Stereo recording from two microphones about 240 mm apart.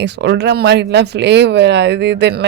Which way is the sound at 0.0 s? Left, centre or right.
Right.